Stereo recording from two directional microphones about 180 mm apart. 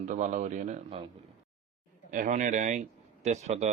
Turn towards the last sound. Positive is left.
turn(degrees=-40)  # may be behind; listen again after turning